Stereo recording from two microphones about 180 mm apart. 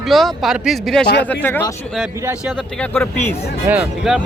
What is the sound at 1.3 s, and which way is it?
Speech, 10° left (ahead or behind).